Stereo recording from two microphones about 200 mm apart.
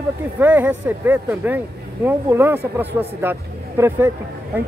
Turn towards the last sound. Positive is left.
turn(degrees=-10)  # may be behind; listen again after turning